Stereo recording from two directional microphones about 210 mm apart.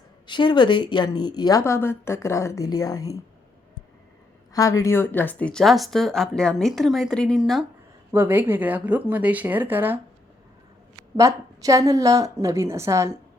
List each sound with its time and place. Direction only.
0.3 s a woman's voice: 20° left (ahead or behind)
4.5 s a woman's voice: 15° left (ahead or behind); by 10.0 s 10° right (ahead or behind)
11.2 s a woman's voice: 15° right (ahead or behind)